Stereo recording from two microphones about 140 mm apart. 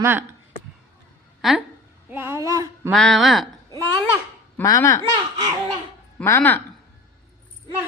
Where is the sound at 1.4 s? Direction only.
Centre (ahead or behind).